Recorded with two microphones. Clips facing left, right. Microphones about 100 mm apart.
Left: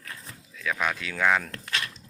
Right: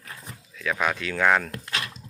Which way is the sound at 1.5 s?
25° right (ahead or behind).